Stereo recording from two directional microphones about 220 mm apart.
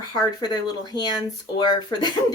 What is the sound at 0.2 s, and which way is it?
Speech, 20° left (ahead or behind).